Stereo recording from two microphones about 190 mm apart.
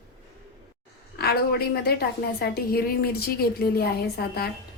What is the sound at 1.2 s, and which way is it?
A woman's voice, 55° left (ahead or behind).